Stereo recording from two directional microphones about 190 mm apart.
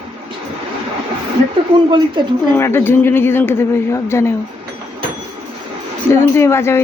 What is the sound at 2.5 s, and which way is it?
A woman's voice, 10° left (ahead or behind).